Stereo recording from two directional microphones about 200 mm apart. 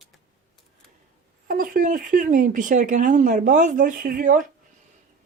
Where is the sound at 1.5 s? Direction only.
45° right (ahead or behind).